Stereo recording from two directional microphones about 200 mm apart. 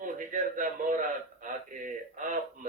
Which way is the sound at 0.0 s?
40° right (ahead or behind).